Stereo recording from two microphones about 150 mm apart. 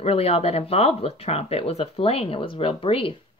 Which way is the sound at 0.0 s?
45° left (ahead or behind).